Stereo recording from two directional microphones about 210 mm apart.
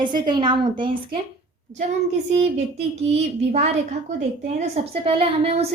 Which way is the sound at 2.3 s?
30° right (ahead or behind).